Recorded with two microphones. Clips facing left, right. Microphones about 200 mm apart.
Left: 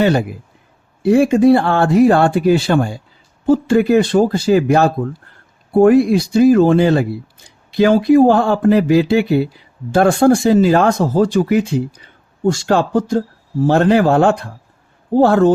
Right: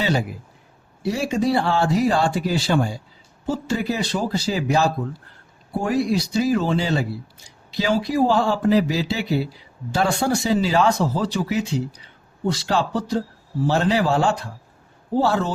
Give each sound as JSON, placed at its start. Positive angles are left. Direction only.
{"t": 0.0, "sound": "speech", "side_deg": 55}